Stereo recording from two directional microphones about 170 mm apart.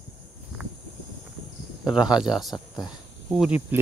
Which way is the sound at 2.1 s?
Centre (ahead or behind).